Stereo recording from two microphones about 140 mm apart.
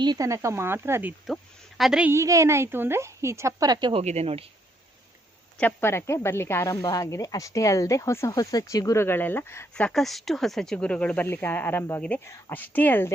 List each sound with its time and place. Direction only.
0.0 s a woman's voice: 25° right (ahead or behind)
1.8 s a woman's voice: 5° right (ahead or behind)
2.1 s a woman's voice: 20° right (ahead or behind)
3.9 s speech: 50° right (ahead or behind)
5.5 s speech: 15° left (ahead or behind)
9.7 s speech: 5° left (ahead or behind)